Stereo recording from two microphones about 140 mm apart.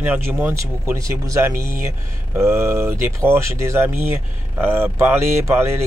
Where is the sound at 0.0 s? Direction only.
10° right (ahead or behind).